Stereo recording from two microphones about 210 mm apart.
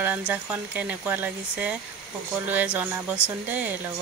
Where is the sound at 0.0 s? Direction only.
10° right (ahead or behind).